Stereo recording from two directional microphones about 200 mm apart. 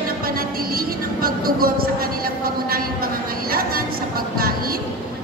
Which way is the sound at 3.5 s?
50° right (ahead or behind).